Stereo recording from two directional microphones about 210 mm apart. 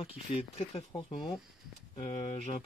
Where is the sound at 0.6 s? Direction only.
25° left (ahead or behind).